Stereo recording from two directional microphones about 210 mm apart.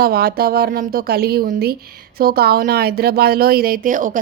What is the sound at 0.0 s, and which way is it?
A woman's voice, 45° right (ahead or behind).